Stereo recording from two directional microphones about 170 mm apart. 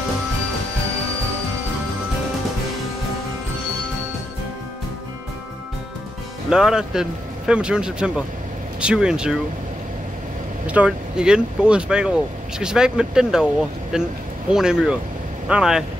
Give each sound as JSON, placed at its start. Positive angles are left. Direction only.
{"t": 6.5, "sound": "speech", "side_deg": -5}
{"t": 10.7, "sound": "speech", "side_deg": -5}